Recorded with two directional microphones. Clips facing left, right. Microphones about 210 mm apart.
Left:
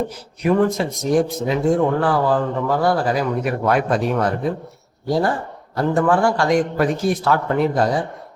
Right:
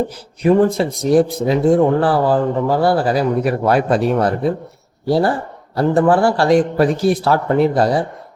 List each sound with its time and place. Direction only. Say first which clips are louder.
0.4 s speech: right 4 dB; 30° right (ahead or behind)